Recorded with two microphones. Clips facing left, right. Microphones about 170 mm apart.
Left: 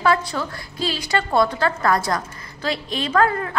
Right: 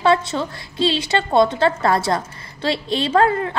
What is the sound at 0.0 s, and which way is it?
Speech, 25° right (ahead or behind).